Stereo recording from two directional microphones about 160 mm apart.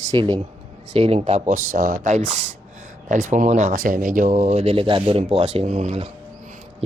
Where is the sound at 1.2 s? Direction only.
50° right (ahead or behind).